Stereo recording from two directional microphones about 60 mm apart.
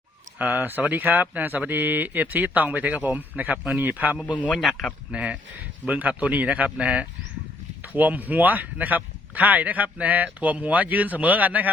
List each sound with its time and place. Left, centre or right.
0.3 s speech: right